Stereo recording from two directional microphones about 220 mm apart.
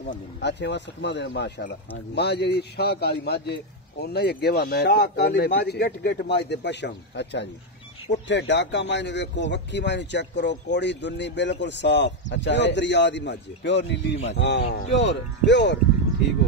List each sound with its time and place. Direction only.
0.4 s a man's voice: 50° left (ahead or behind)